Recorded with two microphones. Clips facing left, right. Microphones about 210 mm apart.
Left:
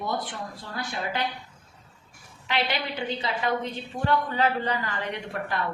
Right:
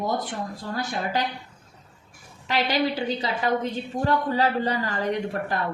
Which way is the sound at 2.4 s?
45° right (ahead or behind).